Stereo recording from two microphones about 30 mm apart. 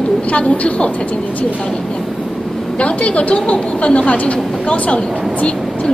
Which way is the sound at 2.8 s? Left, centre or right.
Left.